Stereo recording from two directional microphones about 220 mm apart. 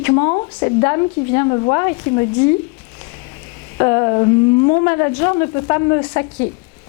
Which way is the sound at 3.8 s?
25° left (ahead or behind).